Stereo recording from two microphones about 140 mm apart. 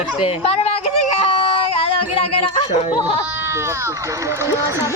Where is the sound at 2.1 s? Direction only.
40° left (ahead or behind).